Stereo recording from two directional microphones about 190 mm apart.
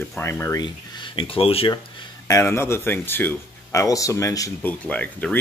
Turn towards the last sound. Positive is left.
turn(degrees=5)  # may be behind; listen again after turning